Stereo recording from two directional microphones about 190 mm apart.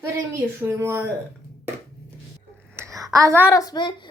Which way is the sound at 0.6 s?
15° right (ahead or behind).